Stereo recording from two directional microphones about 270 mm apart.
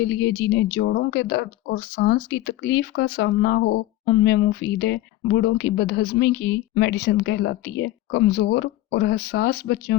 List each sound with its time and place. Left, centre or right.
0.0 s speech: left